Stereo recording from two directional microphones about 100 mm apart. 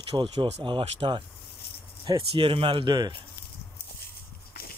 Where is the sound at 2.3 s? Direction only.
60° right (ahead or behind).